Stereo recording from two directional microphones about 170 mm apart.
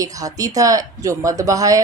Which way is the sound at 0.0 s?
20° right (ahead or behind).